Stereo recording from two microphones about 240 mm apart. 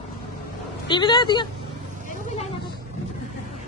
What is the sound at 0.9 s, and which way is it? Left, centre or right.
Speech, centre.